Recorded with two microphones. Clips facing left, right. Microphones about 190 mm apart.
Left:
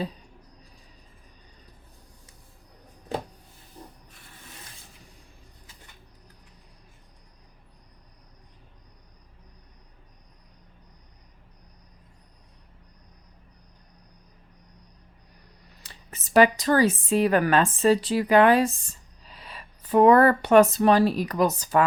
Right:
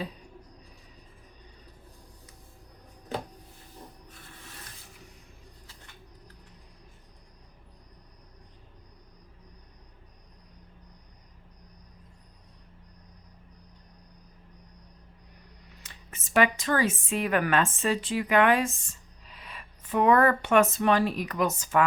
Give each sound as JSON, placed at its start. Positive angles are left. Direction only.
{"t": 15.8, "sound": "speech", "side_deg": 35}